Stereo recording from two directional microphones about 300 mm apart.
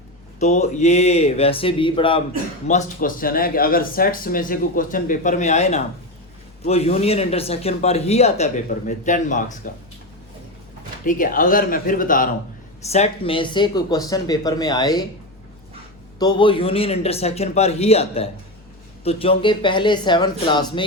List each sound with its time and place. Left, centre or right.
0.3 s speech: left
11.0 s speech: left
16.1 s speech: centre